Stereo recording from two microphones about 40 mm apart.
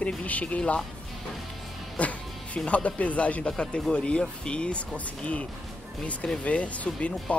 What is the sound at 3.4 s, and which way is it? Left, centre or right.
Speech, left.